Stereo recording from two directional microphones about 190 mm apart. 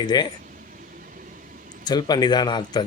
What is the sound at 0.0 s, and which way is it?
Speech, 20° left (ahead or behind).